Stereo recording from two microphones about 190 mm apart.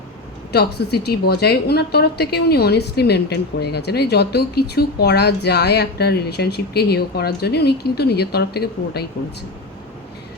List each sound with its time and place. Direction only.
0.5 s a woman's voice: 60° left (ahead or behind)